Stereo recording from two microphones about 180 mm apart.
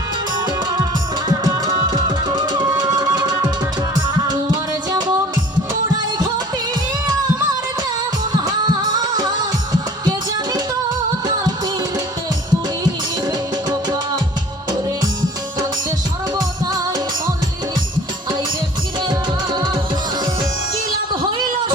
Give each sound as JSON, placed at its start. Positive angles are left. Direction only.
{"t": 0.3, "sound": "music", "side_deg": -25}
{"t": 4.9, "sound": "music", "side_deg": -20}
{"t": 8.3, "sound": "music", "side_deg": -25}
{"t": 12.8, "sound": "music", "side_deg": -20}
{"t": 19.5, "sound": "music", "side_deg": -25}
{"t": 21.1, "sound": "a sound", "side_deg": -25}